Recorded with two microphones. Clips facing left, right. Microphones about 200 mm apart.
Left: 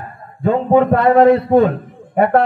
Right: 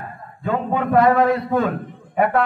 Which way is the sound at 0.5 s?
30° left (ahead or behind).